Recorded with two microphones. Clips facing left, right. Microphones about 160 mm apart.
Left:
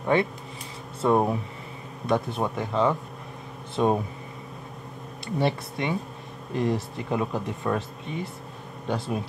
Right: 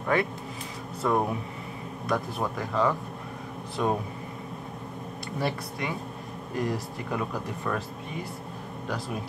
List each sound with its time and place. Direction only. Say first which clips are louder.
0.0 s speech: left 3 dB; 25° left (ahead or behind)
5.4 s speech: left 4 dB; 25° left (ahead or behind)